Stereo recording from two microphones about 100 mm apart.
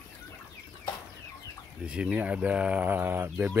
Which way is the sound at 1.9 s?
10° right (ahead or behind).